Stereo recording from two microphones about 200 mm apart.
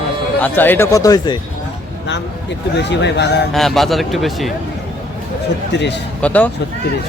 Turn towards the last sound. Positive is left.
turn(degrees=5)  # may be behind; listen again after turning